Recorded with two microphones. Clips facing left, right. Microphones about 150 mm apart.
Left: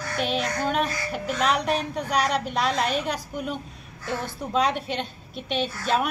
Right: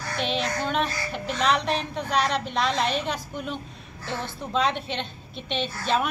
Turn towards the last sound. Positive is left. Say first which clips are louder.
# left 1 dB
turn(degrees=5)  # may be behind; listen again after turning